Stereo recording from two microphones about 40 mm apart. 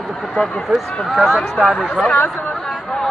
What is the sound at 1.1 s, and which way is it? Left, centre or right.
Speech, centre.